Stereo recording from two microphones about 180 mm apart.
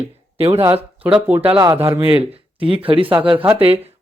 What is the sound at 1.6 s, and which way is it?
A man's voice, 30° right (ahead or behind).